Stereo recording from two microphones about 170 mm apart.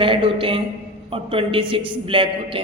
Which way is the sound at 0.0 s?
30° right (ahead or behind).